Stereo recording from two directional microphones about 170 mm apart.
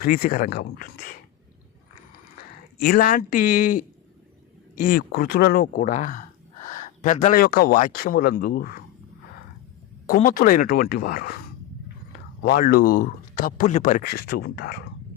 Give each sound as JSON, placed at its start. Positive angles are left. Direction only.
{"t": 0.0, "sound": "speech", "side_deg": 60}
{"t": 2.7, "sound": "speech", "side_deg": 60}
{"t": 4.8, "sound": "speech", "side_deg": 60}
{"t": 10.2, "sound": "speech", "side_deg": 55}
{"t": 12.4, "sound": "speech", "side_deg": 65}